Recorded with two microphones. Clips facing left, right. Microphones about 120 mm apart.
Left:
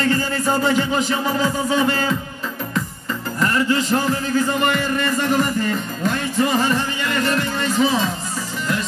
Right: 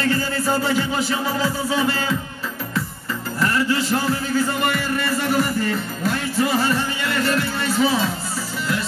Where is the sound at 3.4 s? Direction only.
10° right (ahead or behind).